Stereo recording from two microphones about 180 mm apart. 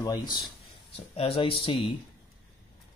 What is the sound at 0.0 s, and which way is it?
Speech, 20° left (ahead or behind).